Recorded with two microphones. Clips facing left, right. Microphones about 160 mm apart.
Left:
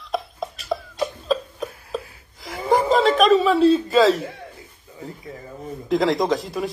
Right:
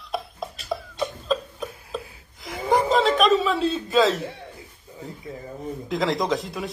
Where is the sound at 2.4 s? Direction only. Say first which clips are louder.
Left 2 dB; centre (ahead or behind).